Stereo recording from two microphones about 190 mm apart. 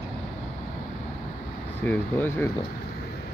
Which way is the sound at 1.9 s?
10° left (ahead or behind).